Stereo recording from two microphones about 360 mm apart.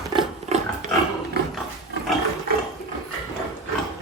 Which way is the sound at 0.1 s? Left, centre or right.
Centre.